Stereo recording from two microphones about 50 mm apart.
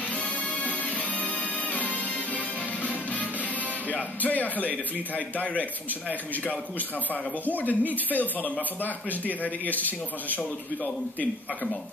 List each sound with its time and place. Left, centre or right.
0.1 s music: left
3.9 s speech: left